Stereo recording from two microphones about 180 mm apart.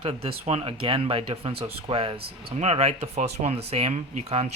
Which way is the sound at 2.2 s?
60° right (ahead or behind).